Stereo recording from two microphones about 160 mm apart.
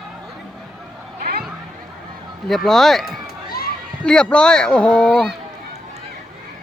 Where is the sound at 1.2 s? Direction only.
75° right (ahead or behind).